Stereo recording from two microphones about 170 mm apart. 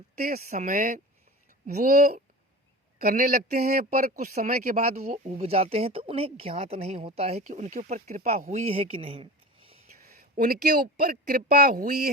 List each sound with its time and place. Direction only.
0.2 s speech: 60° right (ahead or behind)
4.4 s speech: 40° right (ahead or behind)
10.1 s speech: 60° right (ahead or behind)